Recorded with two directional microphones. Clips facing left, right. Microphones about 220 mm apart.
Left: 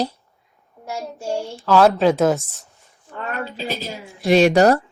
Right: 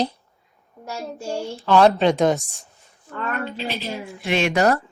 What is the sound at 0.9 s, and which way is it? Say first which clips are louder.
Speech: left 2 dB; 15° left (ahead or behind).